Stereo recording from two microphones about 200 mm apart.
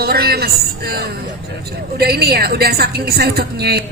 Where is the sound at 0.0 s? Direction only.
50° right (ahead or behind).